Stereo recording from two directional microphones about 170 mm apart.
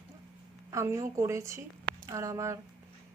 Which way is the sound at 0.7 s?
20° right (ahead or behind).